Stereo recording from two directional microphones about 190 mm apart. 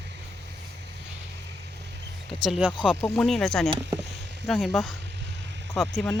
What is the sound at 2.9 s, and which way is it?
Speech, 10° left (ahead or behind).